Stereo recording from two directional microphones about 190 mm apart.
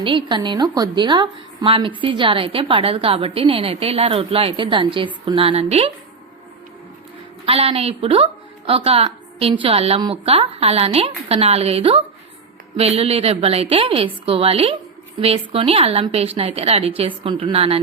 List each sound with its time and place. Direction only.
0.0 s a woman's voice: 25° right (ahead or behind)
7.4 s a woman's voice: 30° right (ahead or behind)